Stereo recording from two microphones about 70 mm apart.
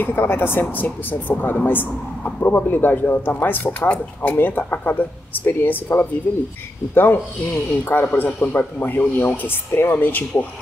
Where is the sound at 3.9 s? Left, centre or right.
Centre.